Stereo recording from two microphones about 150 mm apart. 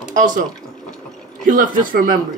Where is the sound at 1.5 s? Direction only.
60° right (ahead or behind).